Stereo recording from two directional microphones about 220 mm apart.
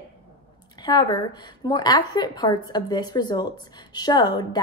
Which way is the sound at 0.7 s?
20° left (ahead or behind).